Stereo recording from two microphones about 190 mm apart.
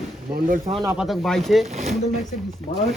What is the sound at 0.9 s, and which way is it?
Speech, centre (ahead or behind).